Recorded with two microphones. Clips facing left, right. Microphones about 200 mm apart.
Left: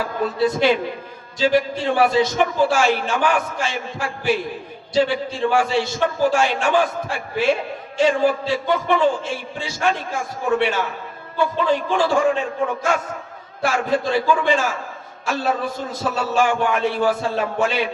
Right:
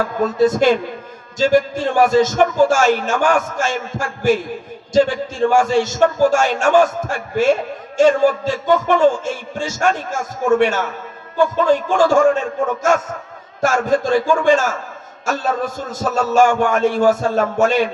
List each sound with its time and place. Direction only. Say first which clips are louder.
0.0 s a man's voice: right 5 dB; 45° right (ahead or behind)
5.4 s a man's voice: right 5 dB; 45° right (ahead or behind)